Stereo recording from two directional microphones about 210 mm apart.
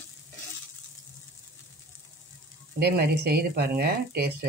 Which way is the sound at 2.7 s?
50° right (ahead or behind).